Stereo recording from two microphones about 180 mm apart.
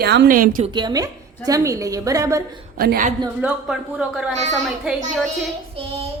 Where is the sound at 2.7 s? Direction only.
55° right (ahead or behind).